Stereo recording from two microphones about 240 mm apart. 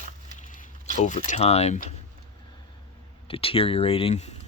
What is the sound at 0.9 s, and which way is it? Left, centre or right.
Speech, left.